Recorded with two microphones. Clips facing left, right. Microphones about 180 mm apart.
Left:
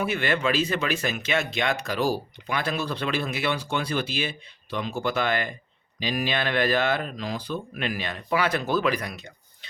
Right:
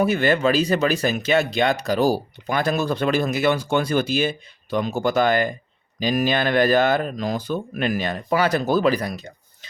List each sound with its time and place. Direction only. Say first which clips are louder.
0.0 s speech: right 7 dB; 40° right (ahead or behind)